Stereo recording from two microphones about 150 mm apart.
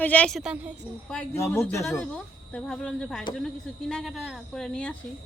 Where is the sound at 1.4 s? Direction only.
15° left (ahead or behind).